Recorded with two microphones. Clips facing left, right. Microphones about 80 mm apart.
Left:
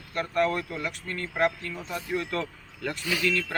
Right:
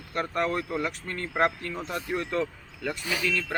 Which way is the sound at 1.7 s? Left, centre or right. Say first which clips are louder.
Right 2 dB; right.